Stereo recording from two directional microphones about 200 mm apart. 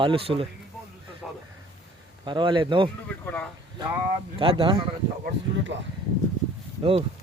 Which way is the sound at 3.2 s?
10° left (ahead or behind).